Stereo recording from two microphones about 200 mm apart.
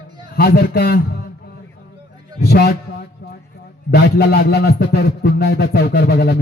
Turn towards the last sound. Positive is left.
turn(degrees=55)  # may be behind; listen again after turning